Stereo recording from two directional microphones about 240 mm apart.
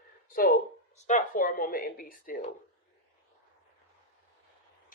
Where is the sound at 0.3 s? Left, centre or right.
Left.